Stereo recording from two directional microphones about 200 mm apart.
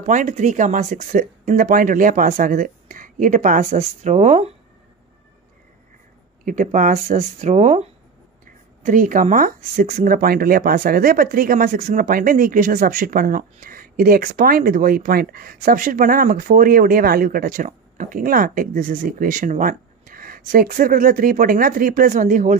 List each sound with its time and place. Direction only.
0.0 s speech: 40° right (ahead or behind)
6.4 s speech: 40° right (ahead or behind)